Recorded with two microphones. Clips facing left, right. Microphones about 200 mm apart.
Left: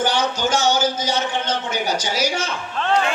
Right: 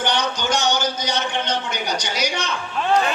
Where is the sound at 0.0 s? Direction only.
5° left (ahead or behind).